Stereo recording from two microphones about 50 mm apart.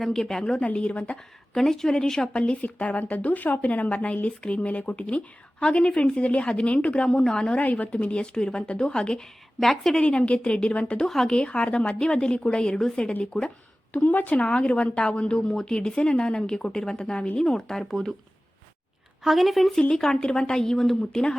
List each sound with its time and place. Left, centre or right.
0.0 s a woman's voice: centre
0.5 s a woman's voice: left
1.5 s a woman's voice: centre
2.4 s a woman's voice: left; by 7.6 s centre
7.6 s a woman's voice: left
7.9 s a woman's voice: centre
10.0 s a woman's voice: left
11.0 s a woman's voice: centre
11.3 s a woman's voice: left
13.9 s a woman's voice: left
14.3 s a woman's voice: left; by 18.1 s centre
19.2 s a woman's voice: centre
19.9 s a woman's voice: centre